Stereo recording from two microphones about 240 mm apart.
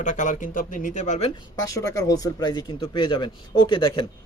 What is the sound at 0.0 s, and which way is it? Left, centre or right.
Speech, left.